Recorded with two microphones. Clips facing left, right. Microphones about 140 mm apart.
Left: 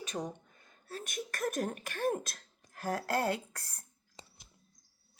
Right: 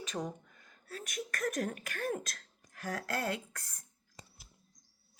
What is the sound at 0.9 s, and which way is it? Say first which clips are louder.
Speech: left 1 dB; 25° left (ahead or behind).